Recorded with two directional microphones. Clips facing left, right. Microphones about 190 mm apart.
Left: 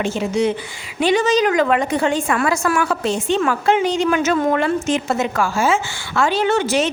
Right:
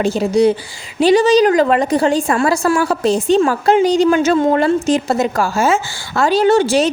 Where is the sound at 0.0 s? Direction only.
35° right (ahead or behind).